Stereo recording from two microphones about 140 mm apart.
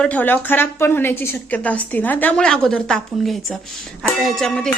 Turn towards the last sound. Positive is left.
turn(degrees=5)  # may be behind; listen again after turning